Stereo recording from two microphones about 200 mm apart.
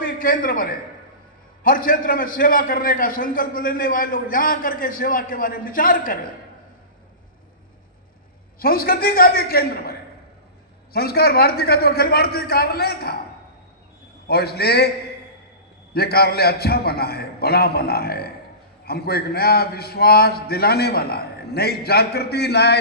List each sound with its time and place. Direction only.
0.0 s a man's voice: 45° left (ahead or behind)
8.5 s a man's voice: 45° left (ahead or behind)
10.9 s a man's voice: 50° left (ahead or behind)
14.3 s a man's voice: 55° left (ahead or behind)
15.9 s a man's voice: 50° left (ahead or behind)